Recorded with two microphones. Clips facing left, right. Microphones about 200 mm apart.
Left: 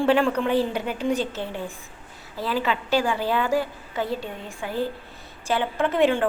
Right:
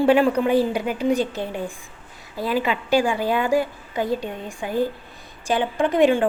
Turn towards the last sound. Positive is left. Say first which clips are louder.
# right 3 dB
turn(degrees=-15)  # may be behind; listen again after turning